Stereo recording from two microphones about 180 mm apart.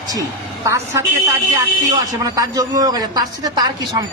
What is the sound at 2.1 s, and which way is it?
A woman's voice, 20° right (ahead or behind).